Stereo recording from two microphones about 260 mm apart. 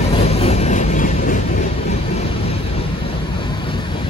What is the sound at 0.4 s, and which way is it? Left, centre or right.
Vehicle, left.